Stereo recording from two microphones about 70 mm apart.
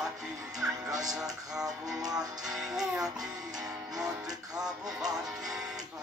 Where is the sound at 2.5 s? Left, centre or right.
Centre.